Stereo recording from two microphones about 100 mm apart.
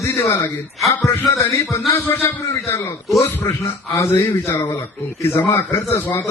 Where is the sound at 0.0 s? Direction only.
20° left (ahead or behind).